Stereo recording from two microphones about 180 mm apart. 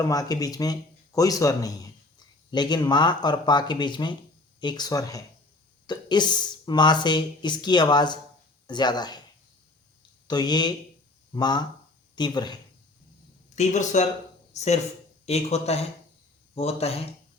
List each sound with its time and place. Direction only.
0.0 s speech: 20° left (ahead or behind)
10.2 s speech: 25° left (ahead or behind)
13.6 s speech: 40° left (ahead or behind)